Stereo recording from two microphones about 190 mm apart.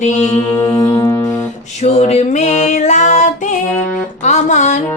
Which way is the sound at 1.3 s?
35° left (ahead or behind).